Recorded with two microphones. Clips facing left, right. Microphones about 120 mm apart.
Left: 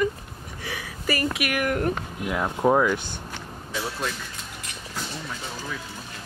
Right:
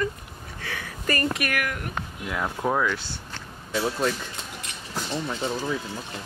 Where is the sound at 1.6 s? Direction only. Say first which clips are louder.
Left 8 dB; 40° left (ahead or behind).